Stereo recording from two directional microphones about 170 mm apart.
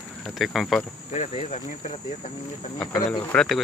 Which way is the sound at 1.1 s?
40° left (ahead or behind).